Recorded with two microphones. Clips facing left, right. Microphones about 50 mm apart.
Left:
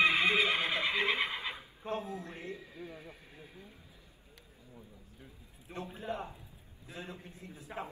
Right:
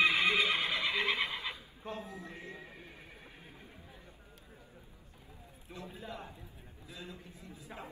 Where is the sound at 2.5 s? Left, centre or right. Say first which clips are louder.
Left 3 dB; right.